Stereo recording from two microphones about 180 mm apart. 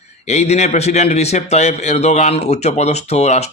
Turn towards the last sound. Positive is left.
turn(degrees=40)  # may be behind; listen again after turning